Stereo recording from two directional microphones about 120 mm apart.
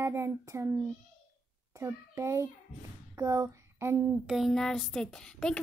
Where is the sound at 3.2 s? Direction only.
25° right (ahead or behind).